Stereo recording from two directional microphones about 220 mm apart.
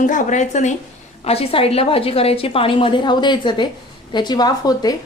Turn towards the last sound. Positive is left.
turn(degrees=15)  # may be behind; listen again after turning